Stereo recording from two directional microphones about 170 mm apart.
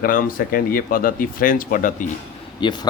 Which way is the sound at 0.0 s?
60° left (ahead or behind).